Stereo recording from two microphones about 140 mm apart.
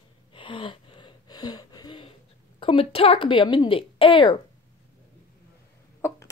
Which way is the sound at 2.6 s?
40° left (ahead or behind).